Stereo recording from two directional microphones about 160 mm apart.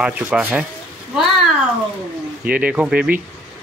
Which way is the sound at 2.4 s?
5° right (ahead or behind).